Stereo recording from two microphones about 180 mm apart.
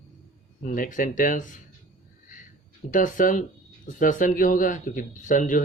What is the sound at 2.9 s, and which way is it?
Speech, 45° left (ahead or behind).